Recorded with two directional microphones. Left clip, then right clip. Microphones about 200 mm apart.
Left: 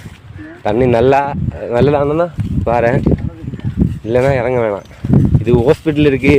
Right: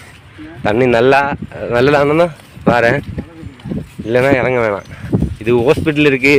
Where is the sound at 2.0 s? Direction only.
5° right (ahead or behind).